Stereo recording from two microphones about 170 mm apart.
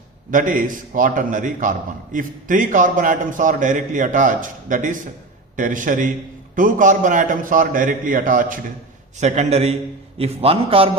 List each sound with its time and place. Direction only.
0.3 s a man's voice: 50° right (ahead or behind); by 10.9 s 35° right (ahead or behind)